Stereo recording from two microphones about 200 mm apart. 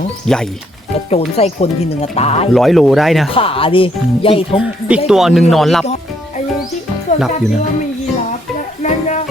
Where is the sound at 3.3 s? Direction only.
25° left (ahead or behind).